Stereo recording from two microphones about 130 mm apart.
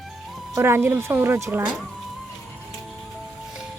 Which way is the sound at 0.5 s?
20° right (ahead or behind).